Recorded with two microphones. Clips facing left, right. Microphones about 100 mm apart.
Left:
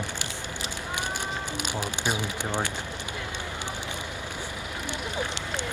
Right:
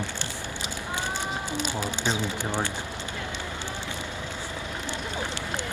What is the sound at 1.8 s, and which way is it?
Speech, 15° left (ahead or behind).